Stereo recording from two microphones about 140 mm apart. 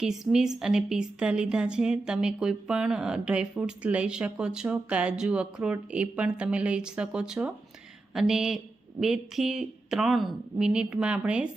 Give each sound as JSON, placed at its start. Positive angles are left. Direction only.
{"t": 0.0, "sound": "a woman's voice", "side_deg": -5}